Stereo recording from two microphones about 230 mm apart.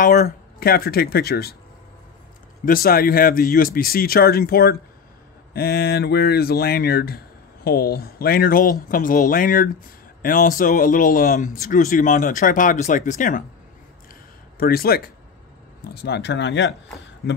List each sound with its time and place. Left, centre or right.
0.0 s speech: left
2.6 s speech: left
14.6 s speech: left